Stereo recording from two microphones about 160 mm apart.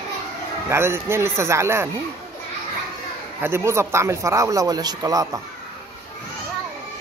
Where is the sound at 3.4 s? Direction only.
15° right (ahead or behind).